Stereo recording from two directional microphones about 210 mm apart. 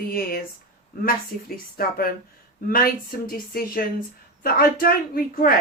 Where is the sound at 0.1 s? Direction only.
45° left (ahead or behind).